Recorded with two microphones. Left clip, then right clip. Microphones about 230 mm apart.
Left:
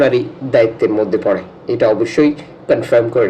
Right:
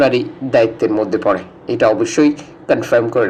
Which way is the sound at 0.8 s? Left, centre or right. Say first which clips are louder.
Left 2 dB; right.